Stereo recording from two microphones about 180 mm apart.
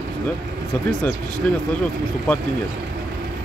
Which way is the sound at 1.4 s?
5° left (ahead or behind).